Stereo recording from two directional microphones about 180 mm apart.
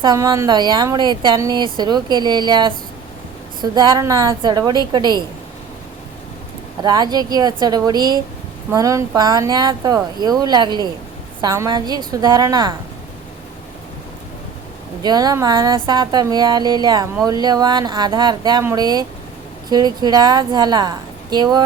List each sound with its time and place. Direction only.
0.0 s speech: 20° right (ahead or behind)
6.8 s speech: 20° right (ahead or behind)
15.0 s speech: 20° right (ahead or behind)